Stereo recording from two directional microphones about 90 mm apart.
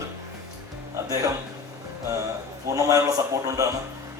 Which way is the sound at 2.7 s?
40° right (ahead or behind).